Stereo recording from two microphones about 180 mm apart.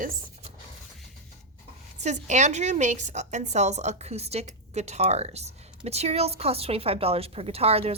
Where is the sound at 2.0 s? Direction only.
40° right (ahead or behind).